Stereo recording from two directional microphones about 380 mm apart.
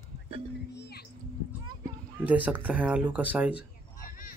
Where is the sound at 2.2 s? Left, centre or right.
Centre.